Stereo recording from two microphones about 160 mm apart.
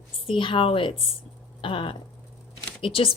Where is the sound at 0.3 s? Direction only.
30° left (ahead or behind).